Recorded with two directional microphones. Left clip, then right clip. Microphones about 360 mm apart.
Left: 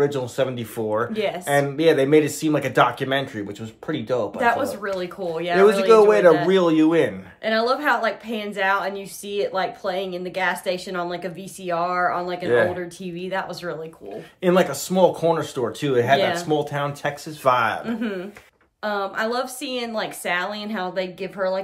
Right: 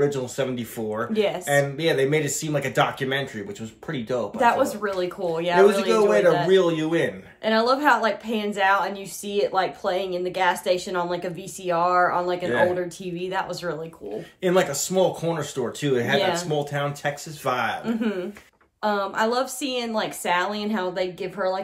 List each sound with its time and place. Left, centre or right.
0.0 s speech: centre
1.1 s a woman's voice: centre
1.4 s speech: centre
4.4 s a woman's voice: centre
5.9 s speech: centre
7.4 s a woman's voice: centre
14.4 s speech: centre
17.8 s a woman's voice: centre